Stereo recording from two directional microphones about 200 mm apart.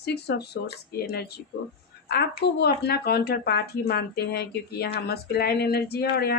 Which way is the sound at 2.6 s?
55° left (ahead or behind).